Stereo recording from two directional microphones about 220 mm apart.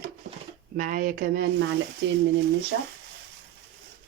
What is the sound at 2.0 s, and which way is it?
Speech, 55° right (ahead or behind).